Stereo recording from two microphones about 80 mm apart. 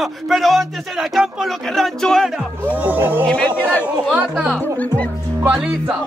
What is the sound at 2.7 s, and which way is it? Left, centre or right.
Speech, right.